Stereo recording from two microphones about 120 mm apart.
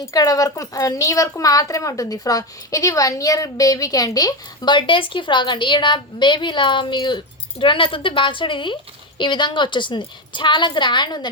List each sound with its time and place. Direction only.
0.0 s speech: 30° left (ahead or behind)